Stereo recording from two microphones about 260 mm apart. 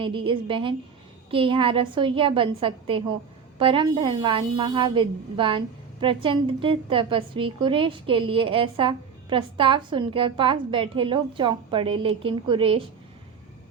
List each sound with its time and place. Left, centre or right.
0.0 s a woman's voice: centre